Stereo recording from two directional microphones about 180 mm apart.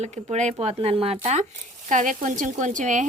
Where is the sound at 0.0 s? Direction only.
40° right (ahead or behind).